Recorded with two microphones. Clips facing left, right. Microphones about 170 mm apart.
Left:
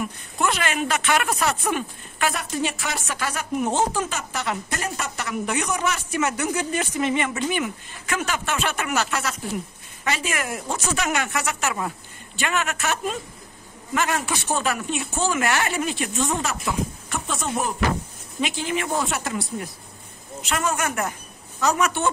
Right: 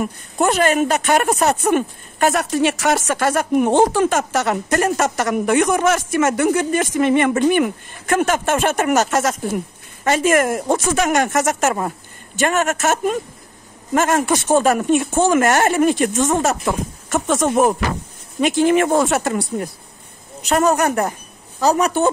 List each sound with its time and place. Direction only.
0.0 s speech: 45° right (ahead or behind)
2.3 s speech: 75° right (ahead or behind)
3.2 s speech: 50° right (ahead or behind)
18.4 s speech: 45° right (ahead or behind)
20.4 s speech: 40° right (ahead or behind)